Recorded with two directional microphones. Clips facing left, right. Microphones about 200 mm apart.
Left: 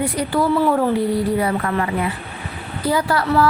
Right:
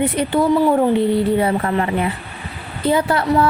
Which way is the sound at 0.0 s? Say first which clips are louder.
Right 3 dB; 25° right (ahead or behind).